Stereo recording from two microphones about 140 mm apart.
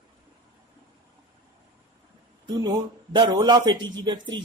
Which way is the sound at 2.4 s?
30° right (ahead or behind).